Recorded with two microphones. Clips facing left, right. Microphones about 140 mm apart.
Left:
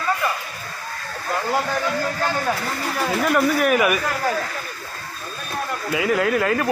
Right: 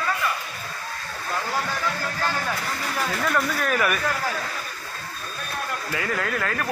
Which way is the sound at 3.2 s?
15° left (ahead or behind).